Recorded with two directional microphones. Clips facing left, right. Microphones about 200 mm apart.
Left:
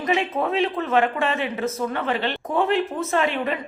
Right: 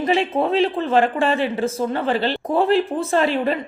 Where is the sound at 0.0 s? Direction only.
30° right (ahead or behind).